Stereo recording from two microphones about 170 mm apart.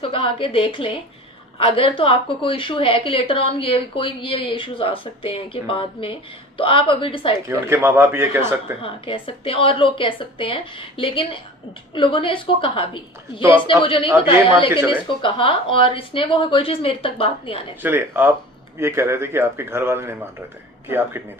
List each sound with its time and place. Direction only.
0.0 s a woman's voice: 30° left (ahead or behind)
7.4 s a man's voice: 15° right (ahead or behind)
8.8 s a woman's voice: 30° left (ahead or behind)
17.8 s a man's voice: 15° right (ahead or behind)